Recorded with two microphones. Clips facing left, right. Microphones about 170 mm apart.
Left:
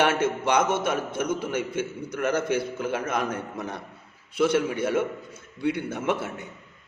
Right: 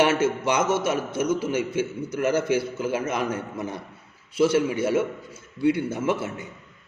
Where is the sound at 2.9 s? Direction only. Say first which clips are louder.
Right 1 dB; 55° left (ahead or behind).